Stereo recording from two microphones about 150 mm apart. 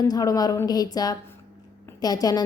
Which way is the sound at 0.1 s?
25° left (ahead or behind).